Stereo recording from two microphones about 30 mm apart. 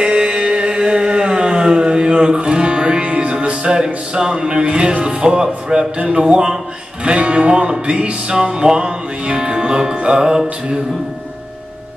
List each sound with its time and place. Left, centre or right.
0.0 s music: right
3.3 s music: right
3.8 s music: right
5.9 s music: right
6.2 s speech: right
7.1 s music: right
8.3 s music: right